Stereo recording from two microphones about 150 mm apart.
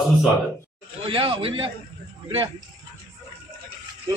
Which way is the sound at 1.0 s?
35° right (ahead or behind).